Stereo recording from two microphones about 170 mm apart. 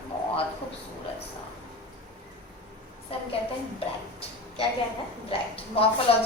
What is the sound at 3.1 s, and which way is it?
Speech, 35° left (ahead or behind).